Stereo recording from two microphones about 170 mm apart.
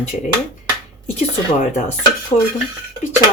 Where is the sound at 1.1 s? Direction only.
50° left (ahead or behind).